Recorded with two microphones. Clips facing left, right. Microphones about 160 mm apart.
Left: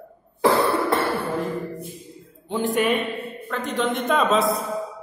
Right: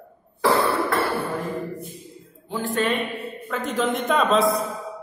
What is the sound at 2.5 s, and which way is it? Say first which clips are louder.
Speech: left 3 dB; 15° left (ahead or behind).